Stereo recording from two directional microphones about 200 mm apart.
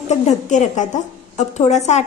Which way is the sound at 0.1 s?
35° left (ahead or behind).